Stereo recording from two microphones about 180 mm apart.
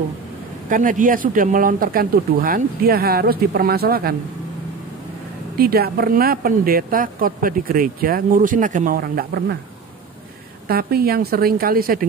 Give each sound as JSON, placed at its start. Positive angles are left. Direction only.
{"t": 0.7, "sound": "speech", "side_deg": -45}
{"t": 5.6, "sound": "speech", "side_deg": -60}
{"t": 10.7, "sound": "a woman's voice", "side_deg": -60}